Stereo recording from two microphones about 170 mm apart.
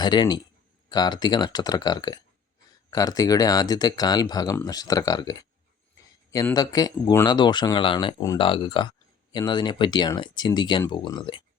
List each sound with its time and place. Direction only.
0.0 s speech: 25° left (ahead or behind)